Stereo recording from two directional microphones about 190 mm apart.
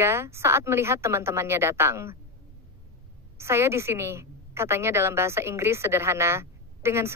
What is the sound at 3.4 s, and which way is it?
Speech, 15° right (ahead or behind).